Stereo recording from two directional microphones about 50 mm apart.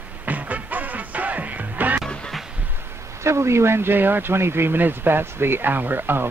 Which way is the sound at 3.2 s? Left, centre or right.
Right.